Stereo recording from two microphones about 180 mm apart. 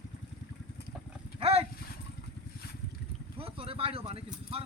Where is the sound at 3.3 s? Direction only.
30° right (ahead or behind).